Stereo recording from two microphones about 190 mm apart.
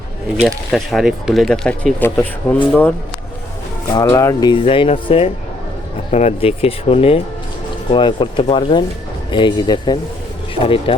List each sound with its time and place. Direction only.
0.4 s speech: centre (ahead or behind)
3.8 s speech: 20° left (ahead or behind)
4.6 s speech: 30° left (ahead or behind)